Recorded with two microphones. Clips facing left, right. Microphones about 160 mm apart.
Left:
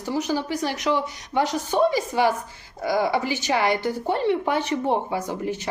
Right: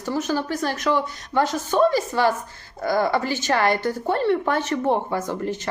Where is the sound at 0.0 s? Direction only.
15° left (ahead or behind).